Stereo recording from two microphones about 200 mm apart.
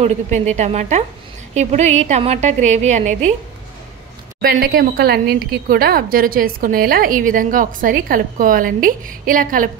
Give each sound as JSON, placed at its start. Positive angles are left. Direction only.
{"t": 0.0, "sound": "a woman's voice", "side_deg": -35}
{"t": 4.4, "sound": "a woman's voice", "side_deg": -50}